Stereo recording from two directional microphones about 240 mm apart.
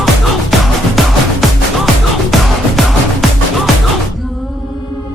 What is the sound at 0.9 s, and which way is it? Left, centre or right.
Music, centre.